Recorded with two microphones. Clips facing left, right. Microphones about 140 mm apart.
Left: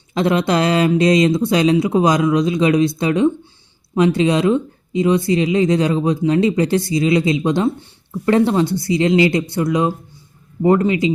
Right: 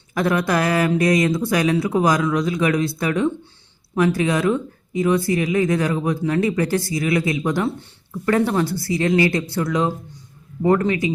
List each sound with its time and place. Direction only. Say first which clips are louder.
0.1 s speech: left 3 dB; 20° left (ahead or behind)